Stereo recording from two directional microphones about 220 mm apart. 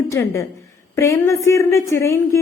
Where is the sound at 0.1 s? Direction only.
15° left (ahead or behind).